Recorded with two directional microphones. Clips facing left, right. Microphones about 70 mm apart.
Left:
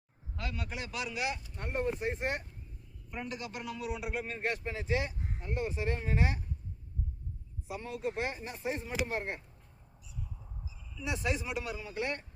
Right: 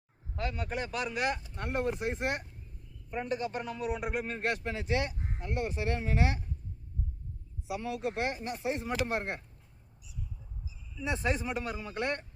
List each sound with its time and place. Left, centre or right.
0.3 s a man's voice: right
1.5 s speech: right
3.1 s a man's voice: right
7.7 s speech: right
11.0 s a man's voice: right